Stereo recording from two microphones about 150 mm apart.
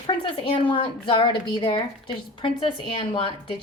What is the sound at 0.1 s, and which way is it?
A woman's voice, 35° left (ahead or behind).